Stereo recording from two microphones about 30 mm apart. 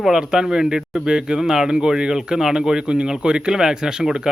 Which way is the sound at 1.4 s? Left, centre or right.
Centre.